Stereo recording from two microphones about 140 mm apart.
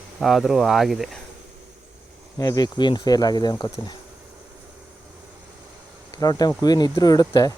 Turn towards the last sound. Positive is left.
turn(degrees=30)  # may be behind; listen again after turning